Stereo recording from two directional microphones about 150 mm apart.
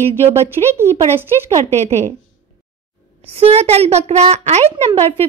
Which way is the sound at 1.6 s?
45° right (ahead or behind).